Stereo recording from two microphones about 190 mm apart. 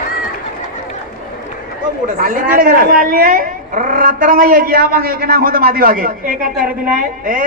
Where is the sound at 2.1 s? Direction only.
45° right (ahead or behind).